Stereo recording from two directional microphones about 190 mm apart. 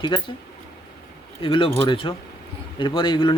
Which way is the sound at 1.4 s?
30° left (ahead or behind).